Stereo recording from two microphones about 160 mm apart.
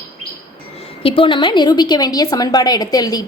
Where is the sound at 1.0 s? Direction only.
35° left (ahead or behind).